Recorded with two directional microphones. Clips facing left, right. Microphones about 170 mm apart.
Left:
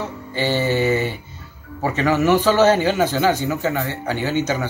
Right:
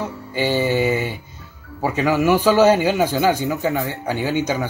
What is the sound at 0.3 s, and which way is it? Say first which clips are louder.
Music: right 1 dB; 10° right (ahead or behind).